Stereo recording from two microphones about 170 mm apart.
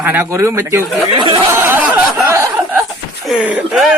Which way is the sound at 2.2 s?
15° right (ahead or behind).